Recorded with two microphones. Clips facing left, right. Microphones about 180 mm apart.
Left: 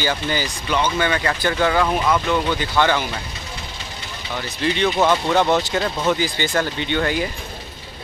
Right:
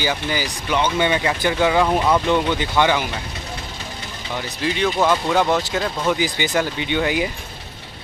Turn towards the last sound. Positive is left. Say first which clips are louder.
# right 1 dB
turn(degrees=-10)  # may be behind; listen again after turning